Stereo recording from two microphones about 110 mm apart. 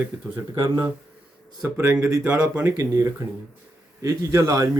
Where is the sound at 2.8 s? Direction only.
30° right (ahead or behind).